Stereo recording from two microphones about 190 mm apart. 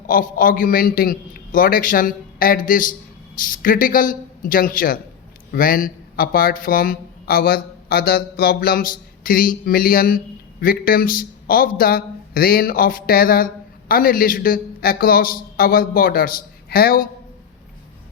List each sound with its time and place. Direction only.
0.1 s a man's voice: 45° left (ahead or behind)